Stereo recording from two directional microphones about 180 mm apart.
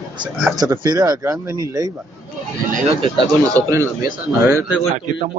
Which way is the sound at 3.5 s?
15° right (ahead or behind).